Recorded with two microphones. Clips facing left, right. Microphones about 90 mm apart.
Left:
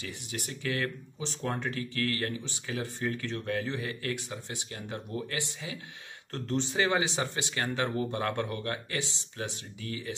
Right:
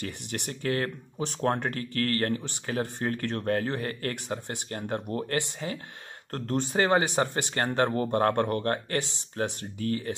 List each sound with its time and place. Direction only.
0.0 s speech: 50° right (ahead or behind)
1.2 s speech: 50° right (ahead or behind)